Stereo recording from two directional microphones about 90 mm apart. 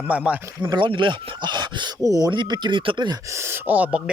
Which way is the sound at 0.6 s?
55° right (ahead or behind).